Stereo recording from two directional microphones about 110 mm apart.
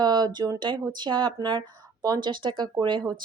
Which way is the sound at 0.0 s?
40° right (ahead or behind).